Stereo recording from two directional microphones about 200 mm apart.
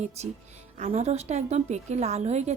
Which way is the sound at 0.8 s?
35° right (ahead or behind).